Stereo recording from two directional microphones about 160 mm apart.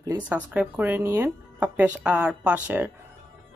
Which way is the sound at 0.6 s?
10° right (ahead or behind).